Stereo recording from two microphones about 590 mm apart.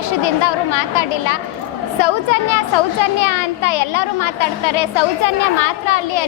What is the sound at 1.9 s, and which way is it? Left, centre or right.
A woman's voice, left.